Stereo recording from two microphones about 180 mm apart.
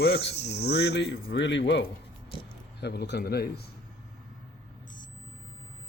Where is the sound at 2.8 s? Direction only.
70° left (ahead or behind).